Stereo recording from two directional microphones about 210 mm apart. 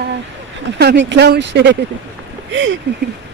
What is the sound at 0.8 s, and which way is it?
Speech, 55° right (ahead or behind).